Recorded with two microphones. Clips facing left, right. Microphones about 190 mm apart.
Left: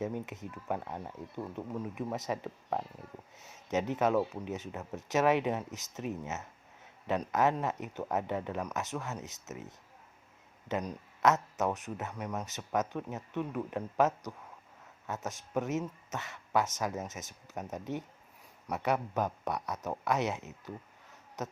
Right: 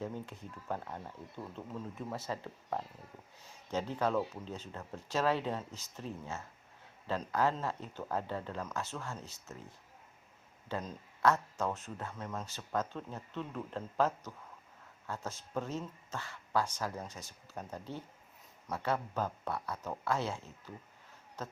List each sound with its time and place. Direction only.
0.0 s speech: 20° left (ahead or behind)